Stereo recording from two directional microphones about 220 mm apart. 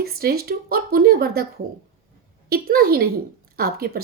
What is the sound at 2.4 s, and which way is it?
Speech, 45° right (ahead or behind).